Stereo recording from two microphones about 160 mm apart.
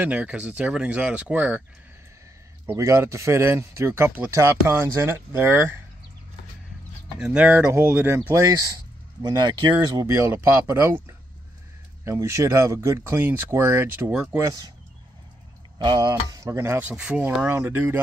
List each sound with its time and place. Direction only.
0.0 s speech: 5° right (ahead or behind)
2.6 s speech: 15° right (ahead or behind)
7.2 s speech: 10° right (ahead or behind)
9.2 s speech: 25° right (ahead or behind); by 14.4 s 10° right (ahead or behind)
14.4 s speech: 25° right (ahead or behind)
15.8 s speech: 25° right (ahead or behind)